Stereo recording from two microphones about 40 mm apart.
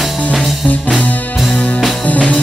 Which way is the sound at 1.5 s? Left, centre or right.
Left.